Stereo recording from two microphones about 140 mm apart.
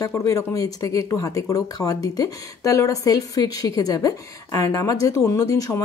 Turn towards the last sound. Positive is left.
turn(degrees=25)  # may be behind; listen again after turning